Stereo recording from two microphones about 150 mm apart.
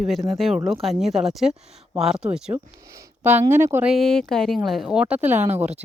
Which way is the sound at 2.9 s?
20° right (ahead or behind).